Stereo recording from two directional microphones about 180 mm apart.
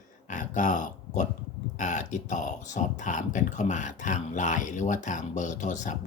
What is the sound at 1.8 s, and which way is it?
Speech, 40° left (ahead or behind).